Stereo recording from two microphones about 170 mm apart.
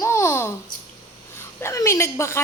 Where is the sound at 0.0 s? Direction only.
15° left (ahead or behind).